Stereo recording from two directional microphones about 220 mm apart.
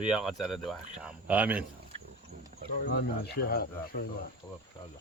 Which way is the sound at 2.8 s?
50° left (ahead or behind).